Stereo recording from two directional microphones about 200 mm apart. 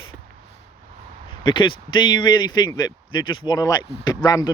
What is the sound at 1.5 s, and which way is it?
Speech, 25° left (ahead or behind).